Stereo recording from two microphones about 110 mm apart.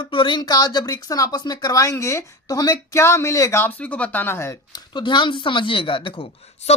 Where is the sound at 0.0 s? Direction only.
50° left (ahead or behind); by 4.5 s 20° left (ahead or behind).